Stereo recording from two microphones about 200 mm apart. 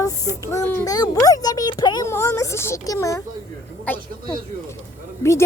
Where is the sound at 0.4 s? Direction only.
15° left (ahead or behind).